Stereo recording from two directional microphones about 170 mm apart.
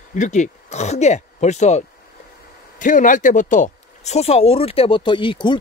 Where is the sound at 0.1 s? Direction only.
45° left (ahead or behind).